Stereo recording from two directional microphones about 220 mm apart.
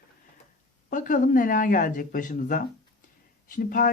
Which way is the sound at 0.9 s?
35° left (ahead or behind).